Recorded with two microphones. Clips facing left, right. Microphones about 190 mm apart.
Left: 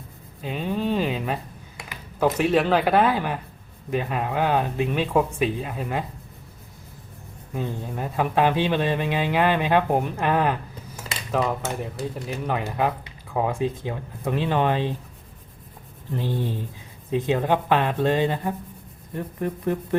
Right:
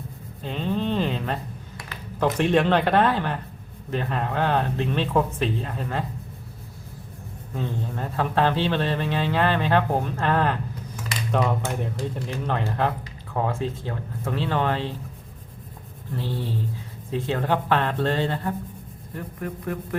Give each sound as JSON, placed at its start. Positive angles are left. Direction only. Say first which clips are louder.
{"t": 0.4, "sound": "a sound", "louder": "even", "side_deg": 10}
{"t": 1.9, "sound": "a man's voice", "louder": "left 2 dB", "side_deg": 10}
{"t": 7.5, "sound": "a man's voice", "louder": "even", "side_deg": 10}
{"t": 16.1, "sound": "a man's voice", "louder": "left 2 dB", "side_deg": 15}
{"t": 19.1, "sound": "speech", "louder": "left 4 dB", "side_deg": 25}